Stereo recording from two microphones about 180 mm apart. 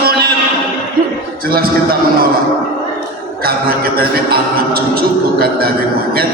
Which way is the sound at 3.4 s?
55° right (ahead or behind).